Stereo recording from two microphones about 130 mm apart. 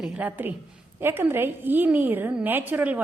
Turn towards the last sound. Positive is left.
turn(degrees=-15)  # may be behind; listen again after turning